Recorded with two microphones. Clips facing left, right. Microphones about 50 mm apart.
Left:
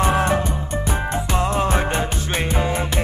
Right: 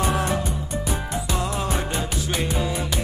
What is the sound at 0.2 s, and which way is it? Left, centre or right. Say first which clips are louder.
Music: left 5 dB; left.